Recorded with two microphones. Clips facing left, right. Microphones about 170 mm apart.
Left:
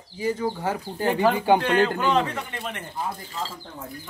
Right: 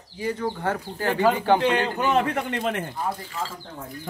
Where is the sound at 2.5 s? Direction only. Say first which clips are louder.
Right 7 dB; 90° right.